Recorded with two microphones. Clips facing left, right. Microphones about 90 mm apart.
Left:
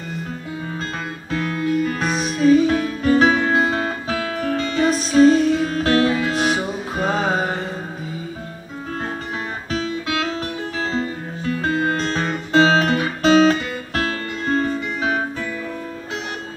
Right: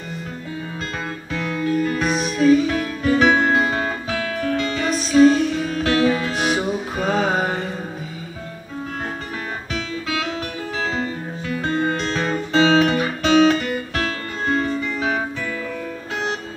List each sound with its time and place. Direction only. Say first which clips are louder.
1.3 s music: left 2 dB; 40° left (ahead or behind)
1.7 s music: even; 40° right (ahead or behind)
2.0 s music: right 1 dB; 35° left (ahead or behind)
9.7 s music: left 4 dB; 35° left (ahead or behind)
12.5 s guitar: even; 35° left (ahead or behind)
14.5 s music: left 1 dB; 35° left (ahead or behind)